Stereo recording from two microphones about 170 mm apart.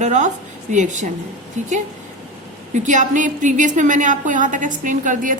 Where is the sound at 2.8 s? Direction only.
50° right (ahead or behind).